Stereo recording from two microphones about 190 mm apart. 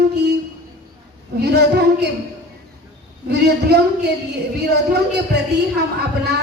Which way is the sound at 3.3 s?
60° right (ahead or behind).